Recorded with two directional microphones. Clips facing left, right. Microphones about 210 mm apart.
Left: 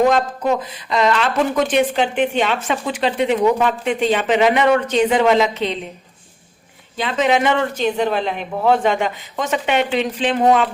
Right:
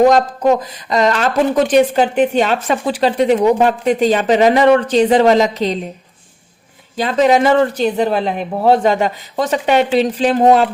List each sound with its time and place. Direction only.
0.1 s speech: 40° right (ahead or behind)
6.9 s speech: 40° right (ahead or behind)